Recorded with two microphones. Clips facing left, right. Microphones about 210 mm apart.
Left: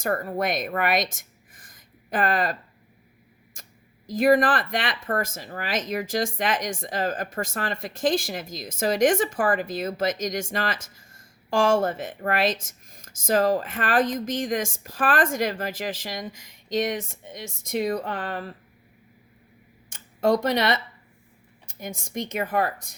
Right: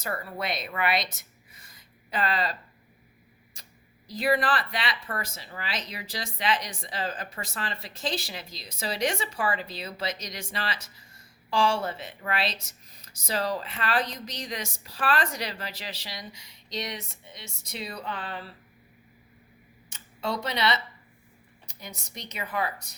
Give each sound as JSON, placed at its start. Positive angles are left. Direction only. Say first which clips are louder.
{"t": 0.0, "sound": "speech", "louder": "left 8 dB", "side_deg": 45}
{"t": 19.9, "sound": "speech", "louder": "left 10 dB", "side_deg": 50}